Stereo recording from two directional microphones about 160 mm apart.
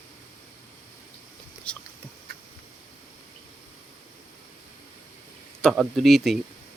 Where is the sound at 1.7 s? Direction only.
5° left (ahead or behind).